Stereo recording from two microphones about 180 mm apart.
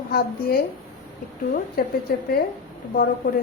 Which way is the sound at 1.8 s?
60° left (ahead or behind).